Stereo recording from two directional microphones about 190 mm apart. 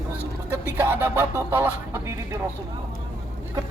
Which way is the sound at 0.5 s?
10° right (ahead or behind).